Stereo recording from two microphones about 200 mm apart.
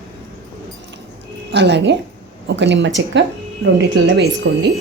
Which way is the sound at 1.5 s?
60° right (ahead or behind).